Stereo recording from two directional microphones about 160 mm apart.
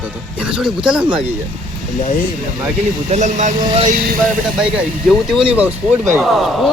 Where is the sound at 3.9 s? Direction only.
70° right (ahead or behind).